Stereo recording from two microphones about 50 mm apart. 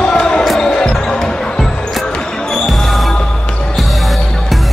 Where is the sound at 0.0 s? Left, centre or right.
Centre.